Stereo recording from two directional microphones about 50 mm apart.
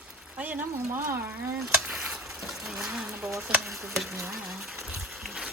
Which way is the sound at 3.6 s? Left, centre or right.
Centre.